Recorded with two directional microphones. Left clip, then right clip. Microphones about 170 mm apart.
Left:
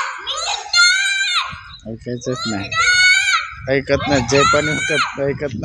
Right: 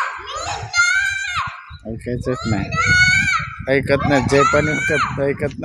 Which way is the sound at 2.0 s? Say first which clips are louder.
Right 1 dB; 10° right (ahead or behind).